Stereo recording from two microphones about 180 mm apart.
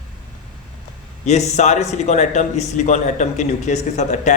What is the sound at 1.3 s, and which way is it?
A man's voice, 40° left (ahead or behind).